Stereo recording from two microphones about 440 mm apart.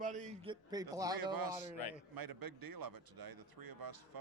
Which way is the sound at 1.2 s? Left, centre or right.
Right.